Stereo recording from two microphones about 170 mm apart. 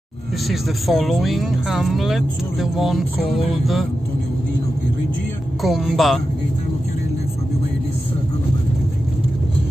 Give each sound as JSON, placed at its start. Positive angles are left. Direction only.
{"t": 0.5, "sound": "speech", "side_deg": 0}
{"t": 5.6, "sound": "speech", "side_deg": 0}